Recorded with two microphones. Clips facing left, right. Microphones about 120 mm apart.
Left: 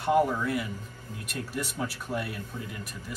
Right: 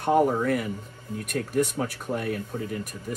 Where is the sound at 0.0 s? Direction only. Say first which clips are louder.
Right 3 dB; 45° right (ahead or behind).